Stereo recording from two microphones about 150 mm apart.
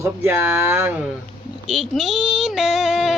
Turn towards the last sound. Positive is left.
turn(degrees=0)  # may be behind; listen again after turning